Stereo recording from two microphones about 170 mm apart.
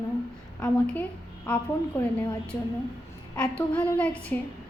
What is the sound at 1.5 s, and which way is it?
Speech, 10° left (ahead or behind).